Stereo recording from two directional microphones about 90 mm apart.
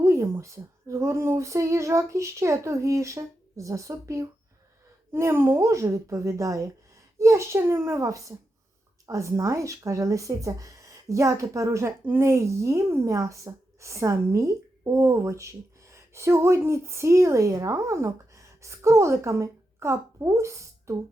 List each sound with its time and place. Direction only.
0.0 s speech: 30° right (ahead or behind)
12.0 s speech: 20° right (ahead or behind)
12.3 s speech: 35° right (ahead or behind)